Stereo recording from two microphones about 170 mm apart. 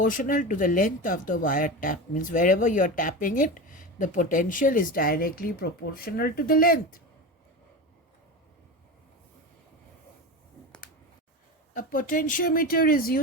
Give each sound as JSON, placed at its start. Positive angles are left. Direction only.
{"t": 0.0, "sound": "speech", "side_deg": 55}
{"t": 11.7, "sound": "speech", "side_deg": 55}